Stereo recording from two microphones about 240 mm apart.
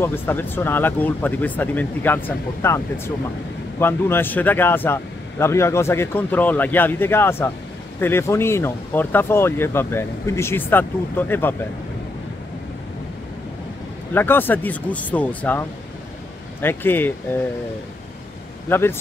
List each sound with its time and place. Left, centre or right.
0.0 s a man's voice: centre
3.8 s a man's voice: centre
14.1 s a man's voice: centre
16.6 s a man's voice: centre
18.7 s a man's voice: centre